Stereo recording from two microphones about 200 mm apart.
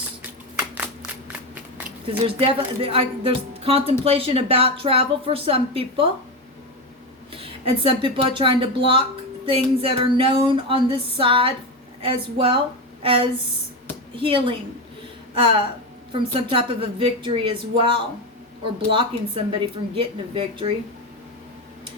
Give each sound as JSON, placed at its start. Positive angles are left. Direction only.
{"t": 2.2, "sound": "speech", "side_deg": -25}
{"t": 7.3, "sound": "speech", "side_deg": -25}